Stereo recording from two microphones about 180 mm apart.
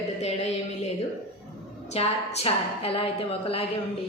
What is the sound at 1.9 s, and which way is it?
A woman's voice, 35° left (ahead or behind).